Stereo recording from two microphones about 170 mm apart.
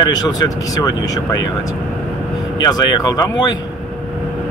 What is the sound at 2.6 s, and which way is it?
Speech, 25° left (ahead or behind).